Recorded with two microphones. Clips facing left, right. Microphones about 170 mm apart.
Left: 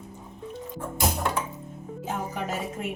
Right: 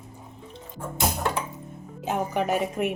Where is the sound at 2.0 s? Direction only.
65° right (ahead or behind).